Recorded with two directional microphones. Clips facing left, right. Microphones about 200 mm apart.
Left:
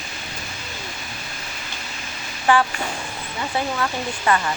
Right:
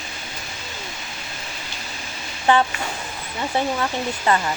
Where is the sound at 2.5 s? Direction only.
20° right (ahead or behind).